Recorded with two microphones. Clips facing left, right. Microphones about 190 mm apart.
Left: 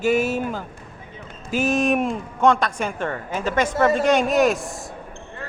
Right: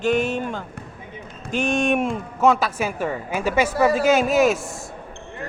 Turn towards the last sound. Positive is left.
turn(degrees=0)  # may be behind; listen again after turning